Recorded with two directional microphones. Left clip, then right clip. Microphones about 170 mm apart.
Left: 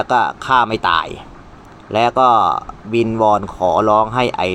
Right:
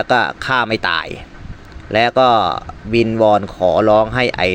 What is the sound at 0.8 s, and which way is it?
Speech, 25° right (ahead or behind).